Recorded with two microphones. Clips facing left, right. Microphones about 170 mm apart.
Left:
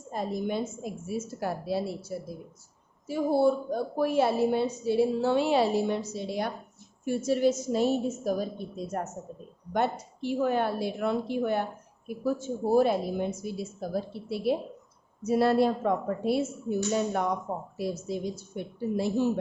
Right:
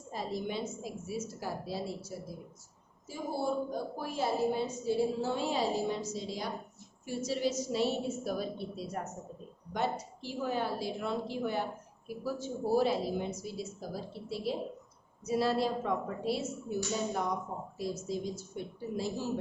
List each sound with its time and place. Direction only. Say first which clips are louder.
0.1 s a woman's voice: left 6 dB; 50° left (ahead or behind)
9.7 s a woman's voice: left 5 dB; 60° left (ahead or behind)